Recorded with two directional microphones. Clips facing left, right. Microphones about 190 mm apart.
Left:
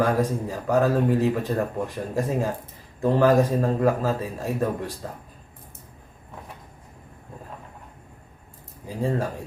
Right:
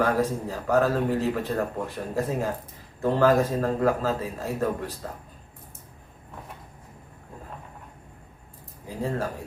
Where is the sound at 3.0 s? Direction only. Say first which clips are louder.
Left 2 dB; 15° left (ahead or behind).